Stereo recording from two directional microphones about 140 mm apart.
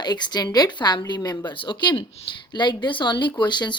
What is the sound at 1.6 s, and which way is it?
Speech, 35° left (ahead or behind).